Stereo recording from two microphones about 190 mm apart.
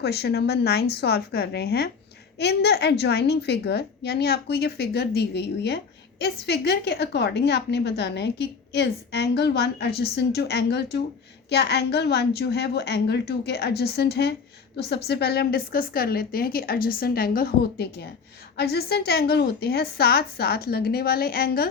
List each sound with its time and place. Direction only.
0.0 s a woman's voice: 60° left (ahead or behind)